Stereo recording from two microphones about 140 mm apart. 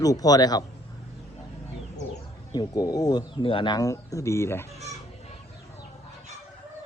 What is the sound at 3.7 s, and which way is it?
Speech, 25° left (ahead or behind).